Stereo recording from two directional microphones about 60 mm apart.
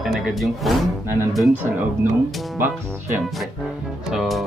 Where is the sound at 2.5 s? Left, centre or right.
Right.